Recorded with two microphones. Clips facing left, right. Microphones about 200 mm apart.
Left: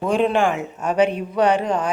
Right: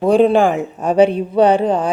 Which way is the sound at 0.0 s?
35° right (ahead or behind).